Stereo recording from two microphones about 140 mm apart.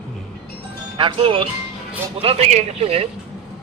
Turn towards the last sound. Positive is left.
turn(degrees=-45)  # may be behind; listen again after turning